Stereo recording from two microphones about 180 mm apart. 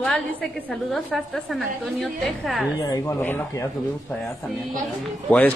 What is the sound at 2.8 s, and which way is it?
Speech, 20° left (ahead or behind).